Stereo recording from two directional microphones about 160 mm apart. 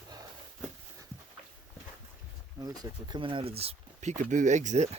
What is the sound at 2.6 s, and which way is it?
Speech, 25° right (ahead or behind).